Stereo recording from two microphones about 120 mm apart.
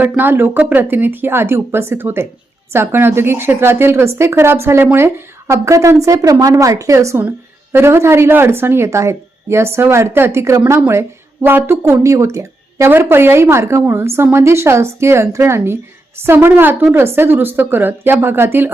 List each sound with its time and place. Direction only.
0.0 s a woman's voice: 15° right (ahead or behind)